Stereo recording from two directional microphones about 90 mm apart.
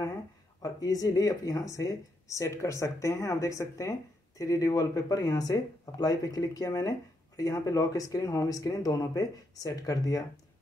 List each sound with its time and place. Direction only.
0.6 s speech: 45° left (ahead or behind)